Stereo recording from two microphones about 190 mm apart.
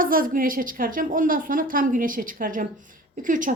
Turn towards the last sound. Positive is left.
turn(degrees=-45)  # may be behind; listen again after turning